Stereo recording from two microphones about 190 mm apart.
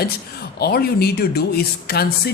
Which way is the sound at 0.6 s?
55° left (ahead or behind).